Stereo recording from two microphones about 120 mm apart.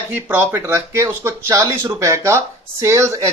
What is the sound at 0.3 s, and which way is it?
Speech, 20° right (ahead or behind).